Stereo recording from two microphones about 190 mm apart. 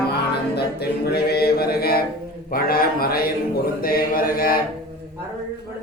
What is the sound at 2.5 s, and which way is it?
Mantra, 50° left (ahead or behind).